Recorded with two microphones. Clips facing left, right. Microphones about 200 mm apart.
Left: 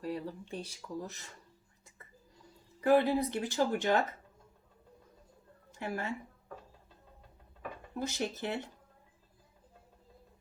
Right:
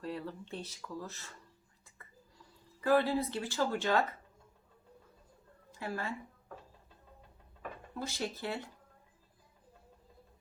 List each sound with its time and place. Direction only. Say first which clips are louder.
0.0 s speech: left 2 dB; 15° left (ahead or behind)
2.8 s speech: left 2 dB; 20° left (ahead or behind)
5.8 s speech: left 2 dB; 20° left (ahead or behind)
7.9 s speech: left 3 dB; 20° left (ahead or behind)